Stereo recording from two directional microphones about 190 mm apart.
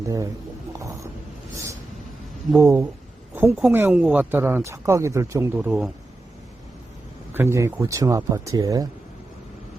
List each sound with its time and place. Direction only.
2.6 s speech: 15° right (ahead or behind)
7.3 s speech: 15° right (ahead or behind)